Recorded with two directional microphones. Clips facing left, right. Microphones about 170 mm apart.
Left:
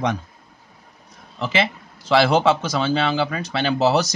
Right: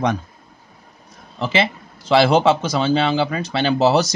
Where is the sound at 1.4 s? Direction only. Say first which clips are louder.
Right 2 dB; 30° right (ahead or behind).